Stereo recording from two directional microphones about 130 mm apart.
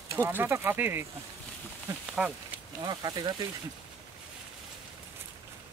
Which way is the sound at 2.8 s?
30° right (ahead or behind).